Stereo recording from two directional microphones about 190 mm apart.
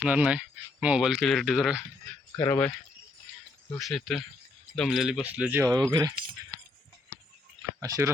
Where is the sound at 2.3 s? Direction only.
10° left (ahead or behind).